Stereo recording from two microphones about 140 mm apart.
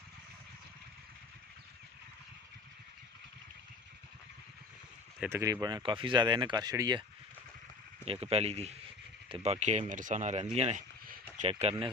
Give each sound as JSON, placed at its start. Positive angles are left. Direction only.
{"t": 5.2, "sound": "speech", "side_deg": -20}
{"t": 8.0, "sound": "speech", "side_deg": -45}